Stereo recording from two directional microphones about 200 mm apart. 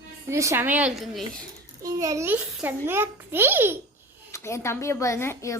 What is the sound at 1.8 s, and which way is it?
A child's voice, 15° right (ahead or behind).